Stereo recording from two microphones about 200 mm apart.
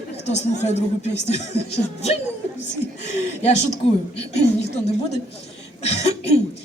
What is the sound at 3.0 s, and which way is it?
A man's voice, 35° left (ahead or behind).